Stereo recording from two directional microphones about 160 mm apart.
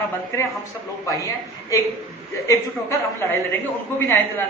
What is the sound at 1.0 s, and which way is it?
A man's voice, 20° left (ahead or behind).